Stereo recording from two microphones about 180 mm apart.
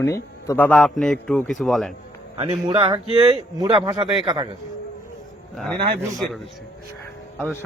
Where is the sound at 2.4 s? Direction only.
30° right (ahead or behind).